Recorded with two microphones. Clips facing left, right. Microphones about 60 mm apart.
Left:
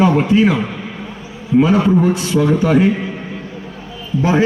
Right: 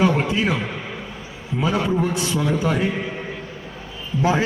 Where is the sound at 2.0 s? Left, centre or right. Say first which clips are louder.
Left 7 dB; left.